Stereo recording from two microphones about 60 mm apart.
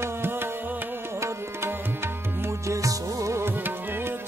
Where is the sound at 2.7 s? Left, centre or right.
Right.